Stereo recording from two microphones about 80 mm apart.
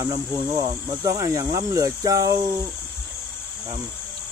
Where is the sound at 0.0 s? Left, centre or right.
Right.